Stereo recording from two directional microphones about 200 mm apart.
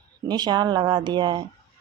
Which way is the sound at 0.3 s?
20° right (ahead or behind).